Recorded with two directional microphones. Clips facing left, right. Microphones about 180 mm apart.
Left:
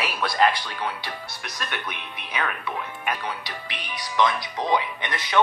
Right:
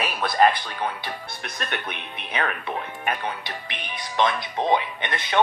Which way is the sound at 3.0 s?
55° right (ahead or behind).